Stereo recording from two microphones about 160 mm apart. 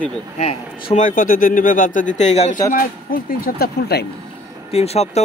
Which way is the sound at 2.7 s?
60° left (ahead or behind).